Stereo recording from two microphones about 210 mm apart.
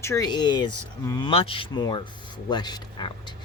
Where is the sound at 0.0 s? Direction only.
15° left (ahead or behind).